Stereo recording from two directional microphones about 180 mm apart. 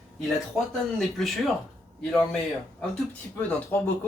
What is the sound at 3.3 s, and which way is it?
Speech, 10° left (ahead or behind).